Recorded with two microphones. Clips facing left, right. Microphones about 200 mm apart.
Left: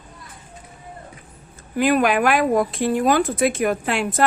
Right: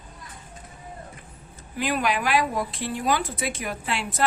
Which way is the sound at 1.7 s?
50° left (ahead or behind).